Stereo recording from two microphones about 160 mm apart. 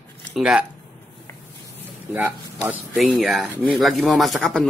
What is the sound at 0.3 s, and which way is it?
Speech, 5° right (ahead or behind).